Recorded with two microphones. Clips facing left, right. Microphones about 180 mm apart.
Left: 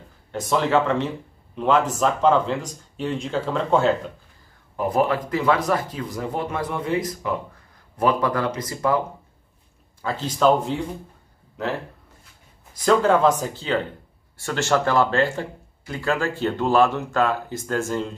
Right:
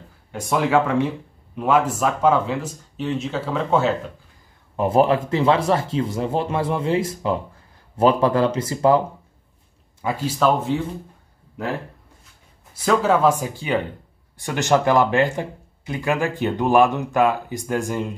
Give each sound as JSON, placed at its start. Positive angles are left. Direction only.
{"t": 0.3, "sound": "speech", "side_deg": -10}
{"t": 4.7, "sound": "speech", "side_deg": -25}
{"t": 10.0, "sound": "speech", "side_deg": -10}
{"t": 12.8, "sound": "speech", "side_deg": -5}